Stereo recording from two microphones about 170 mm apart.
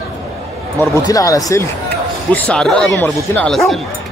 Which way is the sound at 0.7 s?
20° left (ahead or behind).